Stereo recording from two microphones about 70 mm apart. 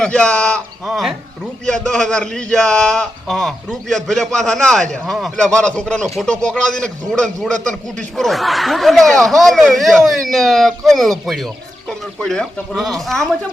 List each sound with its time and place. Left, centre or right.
0.0 s speech: centre
1.6 s a man's voice: centre
3.2 s a man's voice: centre